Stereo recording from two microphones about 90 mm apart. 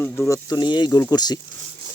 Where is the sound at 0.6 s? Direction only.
55° left (ahead or behind).